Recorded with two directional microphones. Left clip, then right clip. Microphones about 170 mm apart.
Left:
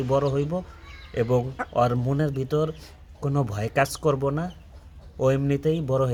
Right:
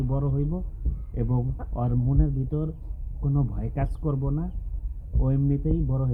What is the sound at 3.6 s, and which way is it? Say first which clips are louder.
Speech: left 11 dB; 20° left (ahead or behind).